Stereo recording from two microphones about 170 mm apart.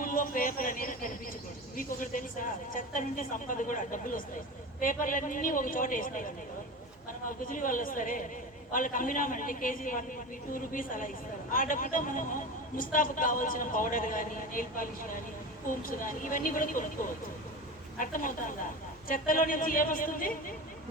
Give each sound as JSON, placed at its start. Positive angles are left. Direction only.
{"t": 0.0, "sound": "a sound", "side_deg": 50}
{"t": 1.7, "sound": "a woman's voice", "side_deg": 50}
{"t": 18.0, "sound": "a woman's voice", "side_deg": 50}